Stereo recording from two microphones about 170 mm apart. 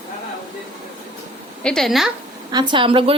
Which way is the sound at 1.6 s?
5° left (ahead or behind).